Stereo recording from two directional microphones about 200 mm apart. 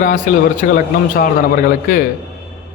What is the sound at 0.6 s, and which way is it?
Speech, 50° left (ahead or behind).